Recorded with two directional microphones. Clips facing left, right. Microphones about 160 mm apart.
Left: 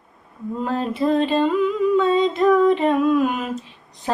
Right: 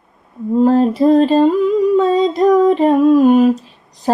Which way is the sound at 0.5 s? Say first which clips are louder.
Right 12 dB; 35° right (ahead or behind).